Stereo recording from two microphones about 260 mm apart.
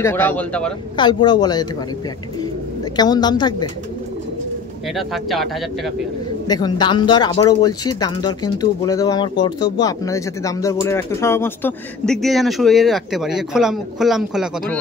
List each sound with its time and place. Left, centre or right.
0.0 s speech: centre
0.9 s speech: centre
2.8 s speech: centre
4.8 s speech: centre
6.4 s speech: centre